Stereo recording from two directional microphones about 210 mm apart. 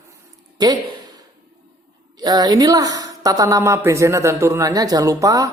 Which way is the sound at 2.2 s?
20° right (ahead or behind).